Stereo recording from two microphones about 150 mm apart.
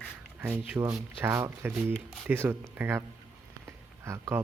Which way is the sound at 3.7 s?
20° right (ahead or behind).